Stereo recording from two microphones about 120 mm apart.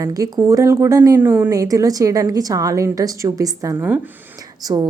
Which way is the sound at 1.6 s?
30° right (ahead or behind).